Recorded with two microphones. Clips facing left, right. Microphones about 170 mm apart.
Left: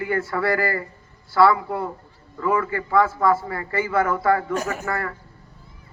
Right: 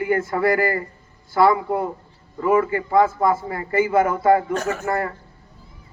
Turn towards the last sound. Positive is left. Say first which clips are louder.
# right 4 dB
turn(degrees=-20)  # may be behind; listen again after turning